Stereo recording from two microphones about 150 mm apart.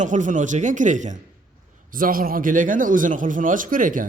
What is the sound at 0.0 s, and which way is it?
A man's voice, 55° right (ahead or behind).